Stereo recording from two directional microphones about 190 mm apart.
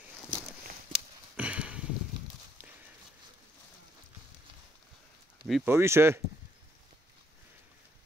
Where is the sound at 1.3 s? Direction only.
5° right (ahead or behind).